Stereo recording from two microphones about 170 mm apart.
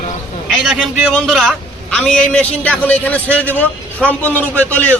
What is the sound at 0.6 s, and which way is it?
A man's voice, centre (ahead or behind).